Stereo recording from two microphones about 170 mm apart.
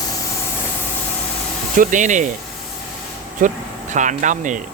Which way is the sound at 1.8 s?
50° right (ahead or behind).